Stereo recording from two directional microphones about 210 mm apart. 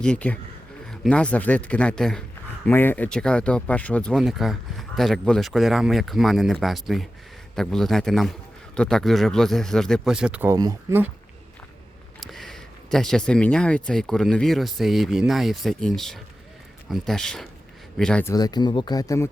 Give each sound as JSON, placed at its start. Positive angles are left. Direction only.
{"t": 0.0, "sound": "speech", "side_deg": 5}
{"t": 12.2, "sound": "speech", "side_deg": 0}